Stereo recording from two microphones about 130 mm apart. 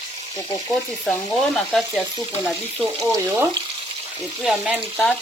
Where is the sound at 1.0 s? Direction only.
5° left (ahead or behind).